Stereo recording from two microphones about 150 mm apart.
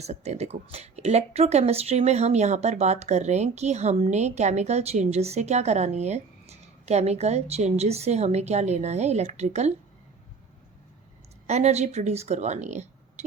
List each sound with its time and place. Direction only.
0.0 s speech: 45° right (ahead or behind)
11.4 s speech: 50° right (ahead or behind)